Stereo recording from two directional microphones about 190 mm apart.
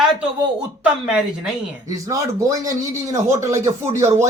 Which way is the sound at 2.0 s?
15° right (ahead or behind).